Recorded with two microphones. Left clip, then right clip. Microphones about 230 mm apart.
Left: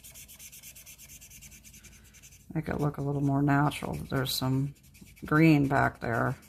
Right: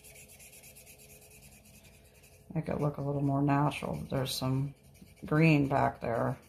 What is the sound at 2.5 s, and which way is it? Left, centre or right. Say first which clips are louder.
Speech: left 1 dB; left.